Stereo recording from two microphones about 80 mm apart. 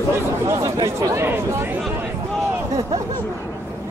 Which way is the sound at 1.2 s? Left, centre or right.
Right.